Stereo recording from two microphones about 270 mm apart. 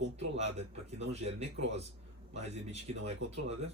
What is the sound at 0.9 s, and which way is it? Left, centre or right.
Speech, right.